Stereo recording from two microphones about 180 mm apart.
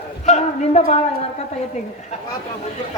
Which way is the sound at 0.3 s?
40° left (ahead or behind).